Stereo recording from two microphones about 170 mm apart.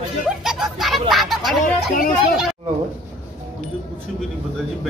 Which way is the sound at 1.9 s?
55° left (ahead or behind).